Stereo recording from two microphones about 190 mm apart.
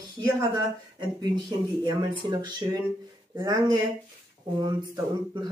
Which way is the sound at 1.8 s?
20° right (ahead or behind).